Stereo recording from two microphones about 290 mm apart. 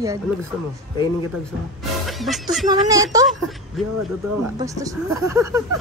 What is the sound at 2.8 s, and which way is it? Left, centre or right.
Speech, centre.